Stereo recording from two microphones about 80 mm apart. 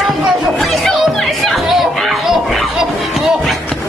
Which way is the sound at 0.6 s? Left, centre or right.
Centre.